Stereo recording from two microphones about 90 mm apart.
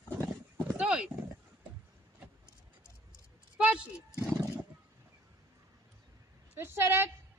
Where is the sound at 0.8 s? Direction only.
10° right (ahead or behind).